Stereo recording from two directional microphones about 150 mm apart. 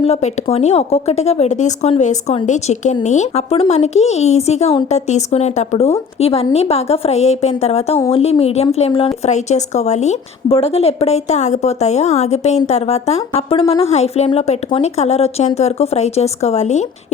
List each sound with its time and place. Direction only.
0.0 s a woman's voice: 45° left (ahead or behind)